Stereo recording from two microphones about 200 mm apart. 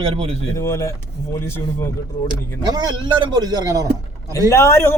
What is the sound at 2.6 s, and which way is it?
A man's voice, 20° right (ahead or behind).